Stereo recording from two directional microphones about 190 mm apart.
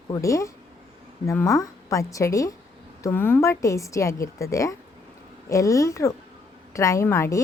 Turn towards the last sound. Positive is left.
turn(degrees=15)  # may be behind; listen again after turning